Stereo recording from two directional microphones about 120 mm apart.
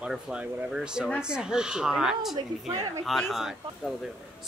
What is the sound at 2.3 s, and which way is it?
Speech, 30° right (ahead or behind).